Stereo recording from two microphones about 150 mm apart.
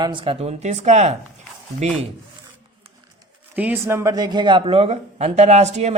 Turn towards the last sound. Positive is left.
turn(degrees=-50)  # may be behind; listen again after turning